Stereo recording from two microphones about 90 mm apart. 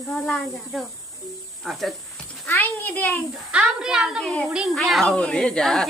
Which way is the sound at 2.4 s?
20° left (ahead or behind).